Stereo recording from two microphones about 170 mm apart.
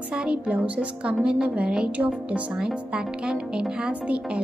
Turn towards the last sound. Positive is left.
turn(degrees=-5)  # may be behind; listen again after turning